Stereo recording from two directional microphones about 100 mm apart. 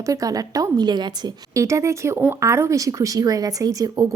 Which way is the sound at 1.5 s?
30° right (ahead or behind).